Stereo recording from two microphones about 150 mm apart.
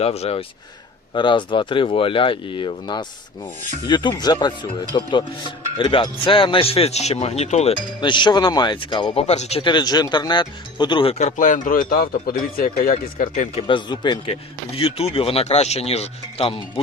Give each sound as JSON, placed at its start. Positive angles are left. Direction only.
{"t": 0.0, "sound": "speech", "side_deg": 45}
{"t": 1.1, "sound": "speech", "side_deg": 35}
{"t": 8.0, "sound": "speech", "side_deg": 30}
{"t": 9.2, "sound": "speech", "side_deg": 50}
{"t": 13.7, "sound": "speech", "side_deg": 30}
{"t": 14.8, "sound": "speech", "side_deg": 40}